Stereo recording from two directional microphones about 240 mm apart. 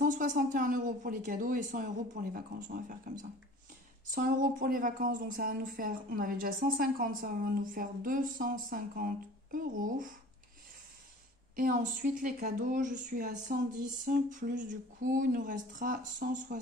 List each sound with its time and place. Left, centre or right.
0.0 s speech: right
11.5 s speech: right